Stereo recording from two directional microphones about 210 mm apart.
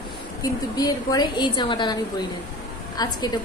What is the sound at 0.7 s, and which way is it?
A woman's voice, 20° left (ahead or behind).